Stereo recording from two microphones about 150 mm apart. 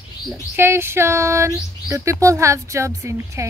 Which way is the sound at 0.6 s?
15° right (ahead or behind).